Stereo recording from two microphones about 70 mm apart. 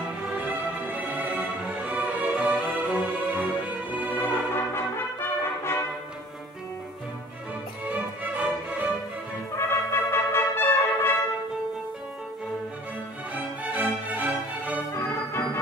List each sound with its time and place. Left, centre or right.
0.4 s music: right
4.1 s brass instrument: left
7.9 s music: right
9.6 s brass instrument: left
13.3 s music: right
14.9 s music: left